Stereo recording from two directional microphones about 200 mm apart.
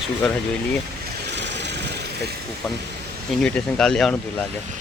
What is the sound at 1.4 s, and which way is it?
Vehicle, 60° right (ahead or behind).